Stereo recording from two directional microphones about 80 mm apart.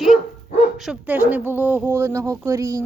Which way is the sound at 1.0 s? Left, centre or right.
Centre.